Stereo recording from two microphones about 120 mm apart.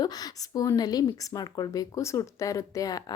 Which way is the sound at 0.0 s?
35° left (ahead or behind).